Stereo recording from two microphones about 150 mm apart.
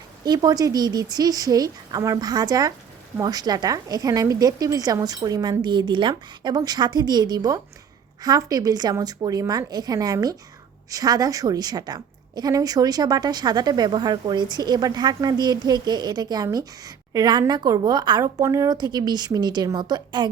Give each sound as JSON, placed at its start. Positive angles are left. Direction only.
{"t": 0.3, "sound": "a woman's voice", "side_deg": -25}